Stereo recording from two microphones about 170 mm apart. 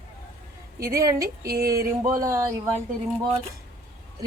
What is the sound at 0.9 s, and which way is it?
A woman's voice, 20° right (ahead or behind).